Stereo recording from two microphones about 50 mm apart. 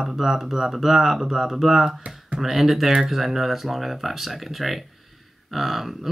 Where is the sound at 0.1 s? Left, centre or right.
Centre.